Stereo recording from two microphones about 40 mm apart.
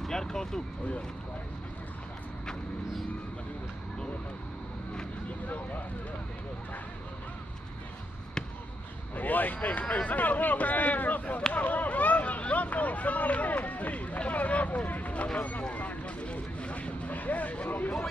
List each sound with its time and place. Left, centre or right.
0.0 s vehicle: centre
9.1 s a sound: left
9.6 s speech: left
10.0 s speech: left
11.5 s a sound: left
14.9 s vehicle: left
15.3 s speech: left
15.7 s vehicle: left
17.6 s speech: left